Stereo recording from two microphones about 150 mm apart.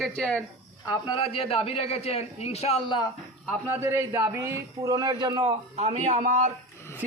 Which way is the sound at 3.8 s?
15° right (ahead or behind).